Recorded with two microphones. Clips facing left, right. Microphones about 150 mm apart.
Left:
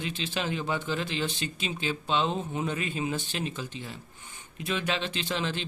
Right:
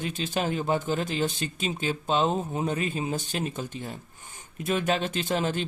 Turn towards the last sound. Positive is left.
turn(degrees=-45)  # may be behind; listen again after turning